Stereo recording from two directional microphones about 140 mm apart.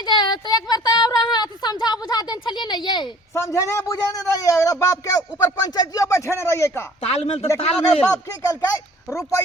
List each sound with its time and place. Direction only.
0.0 s a sound: 30° left (ahead or behind)
3.3 s a man's voice: 20° left (ahead or behind)
7.1 s speech: 50° left (ahead or behind)
8.1 s a man's voice: 25° left (ahead or behind)